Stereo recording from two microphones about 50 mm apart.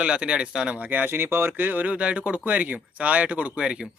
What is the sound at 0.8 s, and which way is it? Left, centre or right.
A man's voice, right.